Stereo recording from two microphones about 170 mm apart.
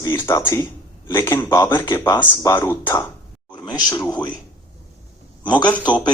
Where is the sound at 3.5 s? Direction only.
25° left (ahead or behind).